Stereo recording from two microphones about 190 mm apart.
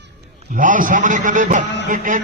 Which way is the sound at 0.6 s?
45° right (ahead or behind).